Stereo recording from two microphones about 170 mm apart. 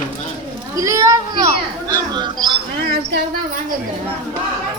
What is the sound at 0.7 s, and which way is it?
Speech, 20° right (ahead or behind).